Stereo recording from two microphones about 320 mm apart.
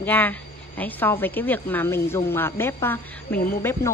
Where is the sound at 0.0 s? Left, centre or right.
Centre.